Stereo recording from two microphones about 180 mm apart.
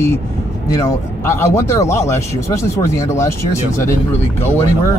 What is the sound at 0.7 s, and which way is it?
Speech, 15° left (ahead or behind).